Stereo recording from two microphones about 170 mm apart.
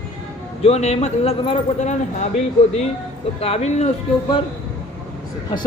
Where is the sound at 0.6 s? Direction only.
40° left (ahead or behind).